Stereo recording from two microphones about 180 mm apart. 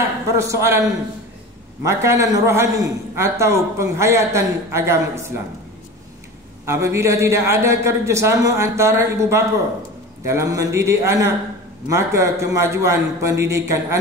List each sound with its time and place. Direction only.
0.4 s a man's voice: 15° right (ahead or behind)
6.6 s a man's voice: 15° right (ahead or behind)